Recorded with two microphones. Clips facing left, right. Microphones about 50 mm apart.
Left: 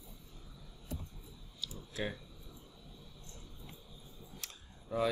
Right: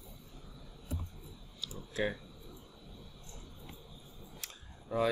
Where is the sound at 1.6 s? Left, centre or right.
Centre.